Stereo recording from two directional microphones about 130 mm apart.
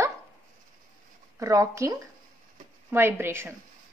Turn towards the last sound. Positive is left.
turn(degrees=-20)  # may be behind; listen again after turning